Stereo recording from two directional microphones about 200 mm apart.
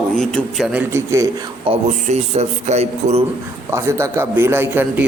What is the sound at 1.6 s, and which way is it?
A man's voice, 35° right (ahead or behind).